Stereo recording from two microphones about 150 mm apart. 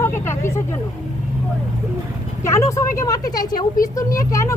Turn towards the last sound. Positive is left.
turn(degrees=20)  # may be behind; listen again after turning